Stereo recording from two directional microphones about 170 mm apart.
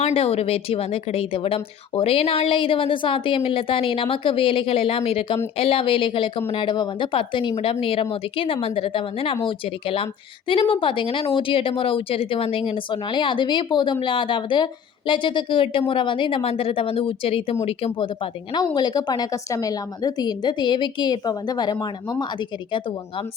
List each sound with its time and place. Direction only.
0.0 s a woman's voice: 35° left (ahead or behind)